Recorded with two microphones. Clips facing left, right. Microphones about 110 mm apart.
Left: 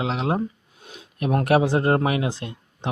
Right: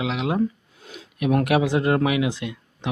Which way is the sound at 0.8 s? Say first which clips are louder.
Right 2 dB; 20° left (ahead or behind).